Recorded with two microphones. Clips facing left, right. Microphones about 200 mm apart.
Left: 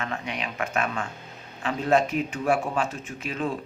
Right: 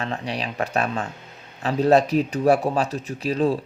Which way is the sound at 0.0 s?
35° right (ahead or behind).